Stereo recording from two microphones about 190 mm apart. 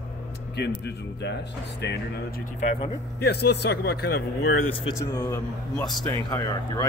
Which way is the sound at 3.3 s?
60° left (ahead or behind).